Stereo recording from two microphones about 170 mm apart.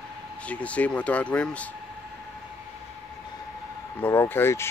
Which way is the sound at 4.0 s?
10° left (ahead or behind).